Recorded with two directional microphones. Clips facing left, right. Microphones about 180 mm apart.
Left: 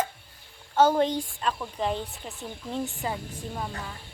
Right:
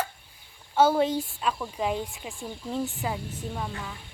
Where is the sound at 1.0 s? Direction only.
5° right (ahead or behind).